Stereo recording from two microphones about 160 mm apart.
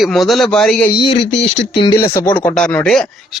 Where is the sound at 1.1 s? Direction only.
90° left.